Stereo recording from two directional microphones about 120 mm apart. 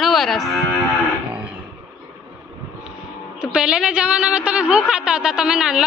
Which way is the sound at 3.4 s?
5° right (ahead or behind).